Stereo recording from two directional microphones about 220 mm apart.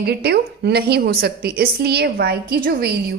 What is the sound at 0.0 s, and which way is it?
A woman's voice, 50° right (ahead or behind).